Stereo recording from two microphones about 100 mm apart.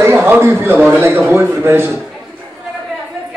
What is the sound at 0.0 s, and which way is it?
A man's voice, 25° right (ahead or behind).